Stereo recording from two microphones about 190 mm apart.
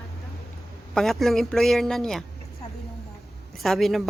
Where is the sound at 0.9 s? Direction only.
Centre (ahead or behind).